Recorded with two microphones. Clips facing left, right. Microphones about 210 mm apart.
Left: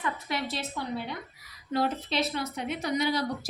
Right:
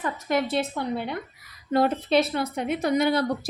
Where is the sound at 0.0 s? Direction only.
45° right (ahead or behind).